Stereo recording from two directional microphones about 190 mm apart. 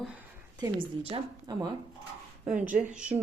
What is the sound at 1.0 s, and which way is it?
Speech, 25° right (ahead or behind).